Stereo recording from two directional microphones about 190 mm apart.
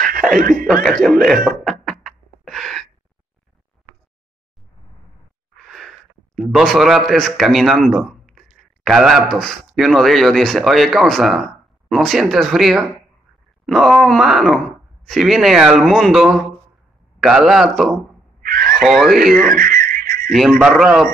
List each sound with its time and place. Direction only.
1.2 s speech: centre (ahead or behind)
1.6 s beatboxing: centre (ahead or behind)
5.7 s speech: centre (ahead or behind)
18.4 s a sound: 50° right (ahead or behind)
18.7 s speech: centre (ahead or behind)
19.4 s a sound: 50° right (ahead or behind)
20.2 s speech: centre (ahead or behind)